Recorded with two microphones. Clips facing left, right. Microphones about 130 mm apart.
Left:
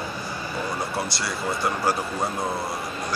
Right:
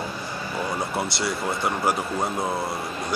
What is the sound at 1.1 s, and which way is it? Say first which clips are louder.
Speech: right 3 dB; 25° right (ahead or behind).